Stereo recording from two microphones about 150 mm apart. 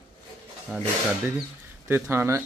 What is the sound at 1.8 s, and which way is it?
Speech, 15° right (ahead or behind).